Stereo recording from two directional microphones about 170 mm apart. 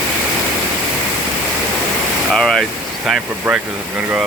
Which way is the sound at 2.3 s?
5° left (ahead or behind).